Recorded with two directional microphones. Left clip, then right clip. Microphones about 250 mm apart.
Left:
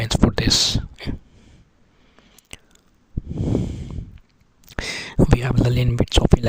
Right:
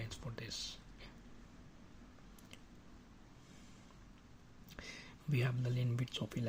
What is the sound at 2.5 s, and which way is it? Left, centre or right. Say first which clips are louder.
Chewing: left 19 dB; left.